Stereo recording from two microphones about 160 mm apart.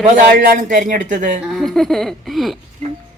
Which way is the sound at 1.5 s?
Centre (ahead or behind).